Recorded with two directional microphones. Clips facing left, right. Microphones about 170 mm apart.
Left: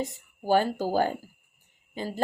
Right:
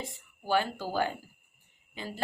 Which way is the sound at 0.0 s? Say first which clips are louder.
Left 8 dB; 45° left (ahead or behind).